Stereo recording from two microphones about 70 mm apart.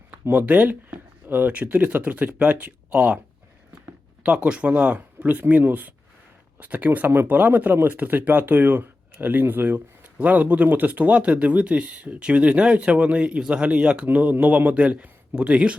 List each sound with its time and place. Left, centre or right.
0.3 s speech: right
4.2 s speech: centre